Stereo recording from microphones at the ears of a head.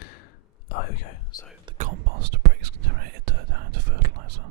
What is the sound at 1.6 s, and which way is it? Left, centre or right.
Whispering, right.